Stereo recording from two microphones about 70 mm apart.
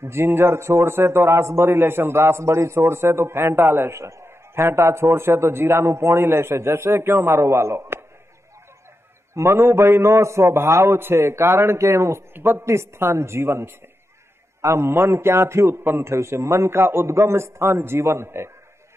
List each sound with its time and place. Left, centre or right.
0.0 s a man's voice: right
9.3 s a man's voice: right